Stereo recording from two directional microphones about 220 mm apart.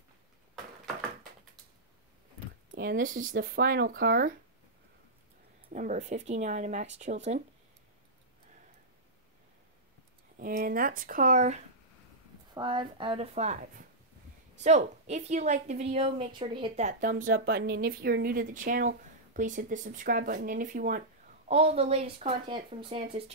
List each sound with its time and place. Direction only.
2.8 s a woman's voice: 40° right (ahead or behind)
5.7 s a woman's voice: 35° right (ahead or behind)
10.4 s a woman's voice: 40° right (ahead or behind)
12.5 s a woman's voice: 20° right (ahead or behind)